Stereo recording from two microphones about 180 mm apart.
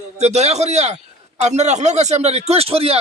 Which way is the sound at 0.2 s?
35° right (ahead or behind).